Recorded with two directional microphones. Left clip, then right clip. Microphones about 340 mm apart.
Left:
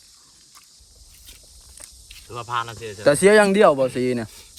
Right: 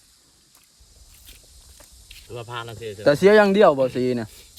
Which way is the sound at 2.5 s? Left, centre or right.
Centre.